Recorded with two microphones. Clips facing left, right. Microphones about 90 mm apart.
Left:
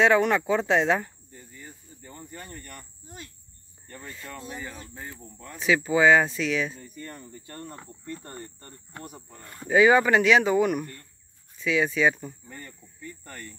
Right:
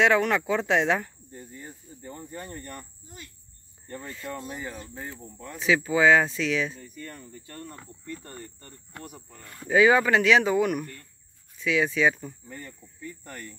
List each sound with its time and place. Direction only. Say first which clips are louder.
0.0 s speech: left 1 dB; 10° left (ahead or behind)
1.3 s cricket: right 5 dB; 25° right (ahead or behind)
1.6 s cricket: right 3 dB; 10° right (ahead or behind)
4.0 s speech: even; 5° left (ahead or behind)
4.3 s speech: right 3 dB; 15° right (ahead or behind); by 7.5 s 15° left (ahead or behind)
7.7 s cricket: left 1 dB; 20° left (ahead or behind)
9.4 s speech: left 1 dB; centre (ahead or behind)